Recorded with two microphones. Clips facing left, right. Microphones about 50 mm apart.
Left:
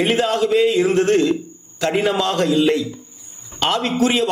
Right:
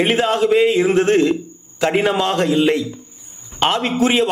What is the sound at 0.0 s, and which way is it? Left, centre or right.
A man's voice, right.